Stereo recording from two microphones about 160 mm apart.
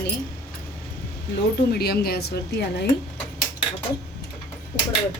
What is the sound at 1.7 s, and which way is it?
Speech, 80° left.